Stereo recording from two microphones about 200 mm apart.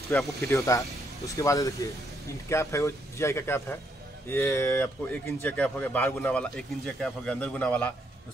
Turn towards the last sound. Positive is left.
turn(degrees=5)  # may be behind; listen again after turning